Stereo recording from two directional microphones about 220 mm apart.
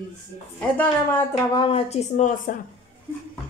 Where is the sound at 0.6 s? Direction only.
5° left (ahead or behind).